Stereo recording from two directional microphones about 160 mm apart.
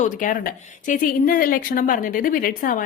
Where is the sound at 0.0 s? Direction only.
55° left (ahead or behind).